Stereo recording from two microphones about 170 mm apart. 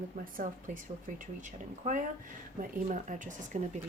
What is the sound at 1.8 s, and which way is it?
Speech, 50° right (ahead or behind).